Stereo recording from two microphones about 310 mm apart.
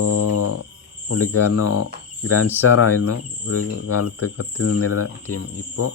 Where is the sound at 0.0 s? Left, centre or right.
Left.